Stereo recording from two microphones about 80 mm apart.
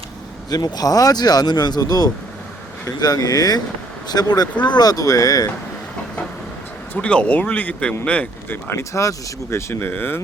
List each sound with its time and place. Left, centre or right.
0.5 s speech: left
6.9 s speech: centre
8.4 s speech: left
8.8 s speech: left